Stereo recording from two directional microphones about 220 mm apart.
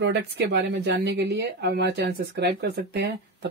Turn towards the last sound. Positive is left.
turn(degrees=-50)  # may be behind; listen again after turning